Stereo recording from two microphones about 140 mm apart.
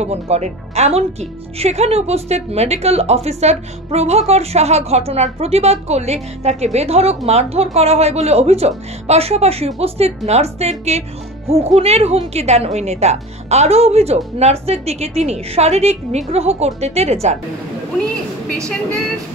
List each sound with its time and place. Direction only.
0.0 s a woman's voice: 50° right (ahead or behind)